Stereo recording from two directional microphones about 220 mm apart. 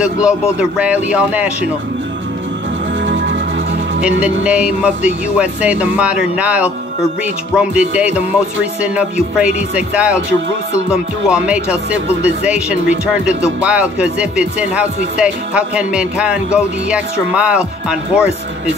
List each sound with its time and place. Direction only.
0.0 s speech: 5° right (ahead or behind)
3.1 s music: 55° right (ahead or behind)
4.2 s speech: 5° right (ahead or behind)
8.8 s speech: 5° right (ahead or behind)